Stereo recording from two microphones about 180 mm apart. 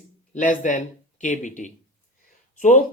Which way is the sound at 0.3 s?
45° left (ahead or behind).